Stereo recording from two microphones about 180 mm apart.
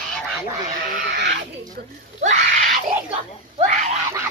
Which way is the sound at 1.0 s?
65° right (ahead or behind).